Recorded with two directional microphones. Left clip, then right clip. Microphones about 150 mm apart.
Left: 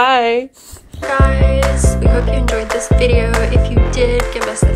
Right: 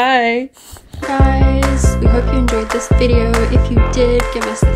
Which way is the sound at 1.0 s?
Centre (ahead or behind).